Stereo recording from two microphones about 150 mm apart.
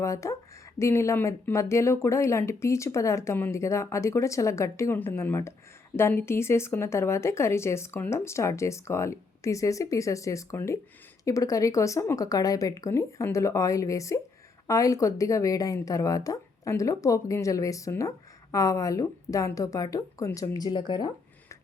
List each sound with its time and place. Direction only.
0.0 s speech: 20° left (ahead or behind)